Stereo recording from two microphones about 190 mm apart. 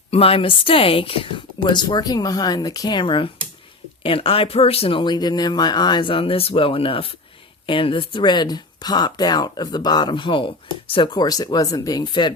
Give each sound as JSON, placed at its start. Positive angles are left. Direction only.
{"t": 0.1, "sound": "speech", "side_deg": 30}